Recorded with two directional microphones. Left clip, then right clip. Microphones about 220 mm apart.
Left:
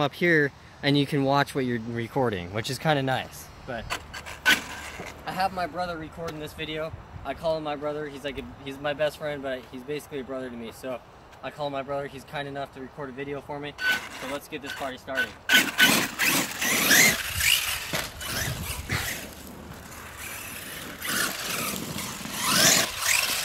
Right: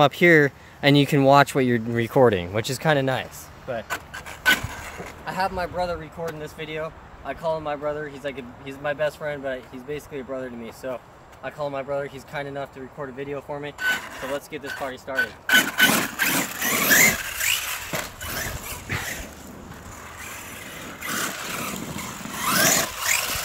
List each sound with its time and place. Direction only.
0.0 s speech: 45° right (ahead or behind)
2.5 s speech: 25° right (ahead or behind)
3.9 s rub: 5° left (ahead or behind)
5.2 s speech: 25° right (ahead or behind)
6.2 s speech: 5° right (ahead or behind)
11.4 s speech: 15° right (ahead or behind)
13.7 s speech: 5° left (ahead or behind)
15.1 s vehicle: centre (ahead or behind)
20.8 s vehicle: 10° left (ahead or behind)
21.5 s vehicle: 25° left (ahead or behind); by 23.4 s centre (ahead or behind)